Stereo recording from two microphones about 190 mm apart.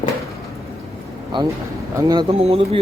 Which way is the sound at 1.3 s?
25° right (ahead or behind).